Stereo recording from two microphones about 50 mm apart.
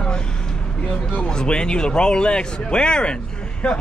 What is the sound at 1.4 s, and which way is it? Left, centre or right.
Speech, centre.